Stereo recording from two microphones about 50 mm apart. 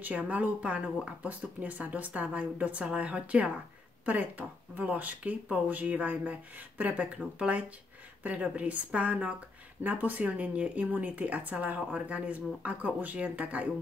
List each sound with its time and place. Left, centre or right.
0.0 s speech: right